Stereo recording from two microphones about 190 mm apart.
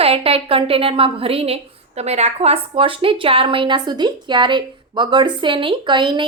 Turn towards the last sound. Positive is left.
turn(degrees=-25)  # may be behind; listen again after turning